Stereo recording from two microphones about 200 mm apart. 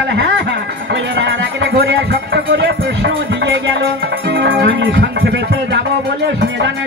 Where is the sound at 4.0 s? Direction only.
50° right (ahead or behind).